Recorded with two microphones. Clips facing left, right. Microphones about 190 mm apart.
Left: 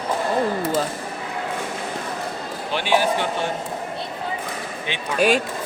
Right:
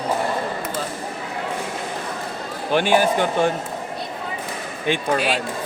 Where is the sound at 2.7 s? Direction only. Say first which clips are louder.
Right 3 dB; 50° right (ahead or behind).